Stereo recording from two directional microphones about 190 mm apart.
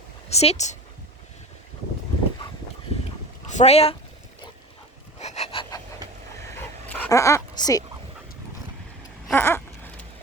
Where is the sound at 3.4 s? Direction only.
35° left (ahead or behind).